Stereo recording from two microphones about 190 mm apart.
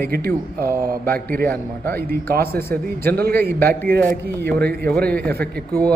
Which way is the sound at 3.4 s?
55° right (ahead or behind).